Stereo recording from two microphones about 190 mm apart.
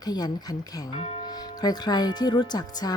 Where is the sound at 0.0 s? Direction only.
20° left (ahead or behind).